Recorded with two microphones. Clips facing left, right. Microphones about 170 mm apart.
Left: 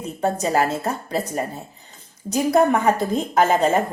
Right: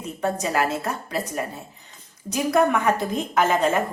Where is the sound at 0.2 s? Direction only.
30° left (ahead or behind).